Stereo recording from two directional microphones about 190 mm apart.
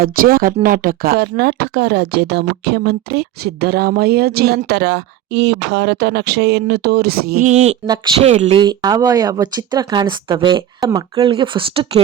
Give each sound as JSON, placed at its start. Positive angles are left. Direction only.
{"t": 0.0, "sound": "speech", "side_deg": -50}
{"t": 7.5, "sound": "speech", "side_deg": -35}
{"t": 8.6, "sound": "speech", "side_deg": -20}